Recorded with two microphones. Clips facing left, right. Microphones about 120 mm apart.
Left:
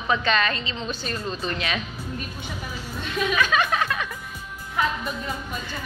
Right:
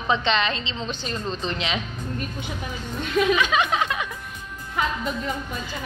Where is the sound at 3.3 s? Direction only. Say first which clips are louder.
Right 1 dB; 20° right (ahead or behind).